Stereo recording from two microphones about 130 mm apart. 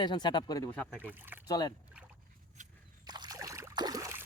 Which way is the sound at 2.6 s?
75° right (ahead or behind).